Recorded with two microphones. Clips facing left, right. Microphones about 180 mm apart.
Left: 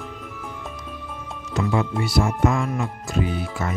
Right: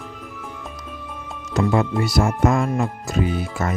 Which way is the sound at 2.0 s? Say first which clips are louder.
Right 2 dB; 45° right (ahead or behind).